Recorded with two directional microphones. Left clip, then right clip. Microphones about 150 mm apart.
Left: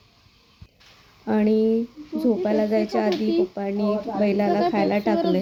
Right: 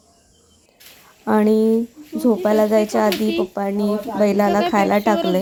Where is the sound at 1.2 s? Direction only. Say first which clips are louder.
Right 5 dB; 20° right (ahead or behind).